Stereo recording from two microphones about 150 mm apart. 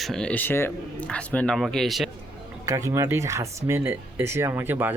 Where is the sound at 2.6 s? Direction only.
20° right (ahead or behind).